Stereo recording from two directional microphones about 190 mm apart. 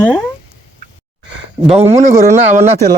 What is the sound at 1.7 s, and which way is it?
Speech, 35° right (ahead or behind).